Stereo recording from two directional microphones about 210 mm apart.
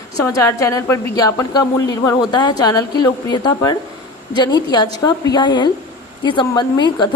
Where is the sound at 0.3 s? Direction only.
15° left (ahead or behind).